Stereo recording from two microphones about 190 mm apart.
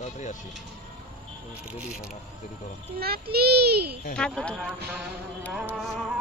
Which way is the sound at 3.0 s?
55° right (ahead or behind).